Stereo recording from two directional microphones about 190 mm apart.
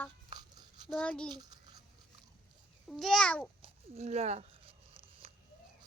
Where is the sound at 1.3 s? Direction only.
20° right (ahead or behind).